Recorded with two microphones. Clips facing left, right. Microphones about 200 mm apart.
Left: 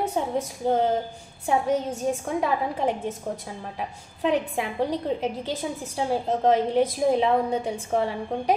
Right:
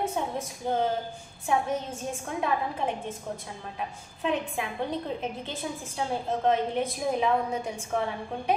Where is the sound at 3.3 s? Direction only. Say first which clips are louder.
Left 4 dB; 45° left (ahead or behind).